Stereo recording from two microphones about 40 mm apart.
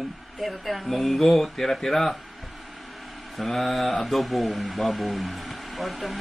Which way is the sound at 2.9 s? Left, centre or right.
Centre.